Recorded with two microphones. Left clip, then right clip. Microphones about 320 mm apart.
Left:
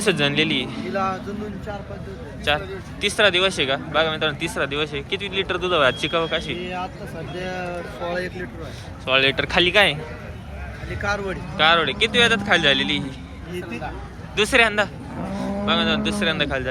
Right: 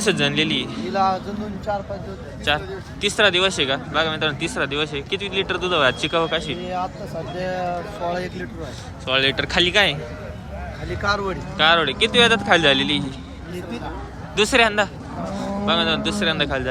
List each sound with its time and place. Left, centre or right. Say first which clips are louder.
0.0 s speech: even; centre
0.9 s speech: right 5 dB; right
2.5 s speech: even; centre
9.0 s speech: left 1 dB; centre
10.8 s speech: right 3 dB; right
11.5 s speech: even; centre
14.3 s speech: right 1 dB; centre